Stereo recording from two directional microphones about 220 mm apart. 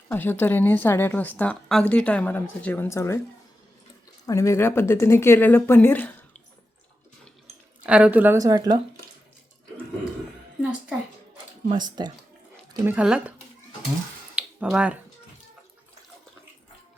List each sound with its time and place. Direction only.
0.1 s speech: 10° left (ahead or behind)
4.3 s speech: 15° left (ahead or behind)
7.9 s a woman's voice: 5° right (ahead or behind)
11.7 s speech: 20° right (ahead or behind)
14.3 s finger snapping: 5° right (ahead or behind)